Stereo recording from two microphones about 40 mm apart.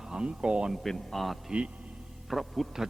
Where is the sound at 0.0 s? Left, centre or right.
Centre.